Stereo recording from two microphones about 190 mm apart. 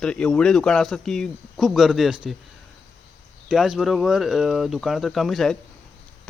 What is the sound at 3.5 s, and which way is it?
Speech, centre (ahead or behind).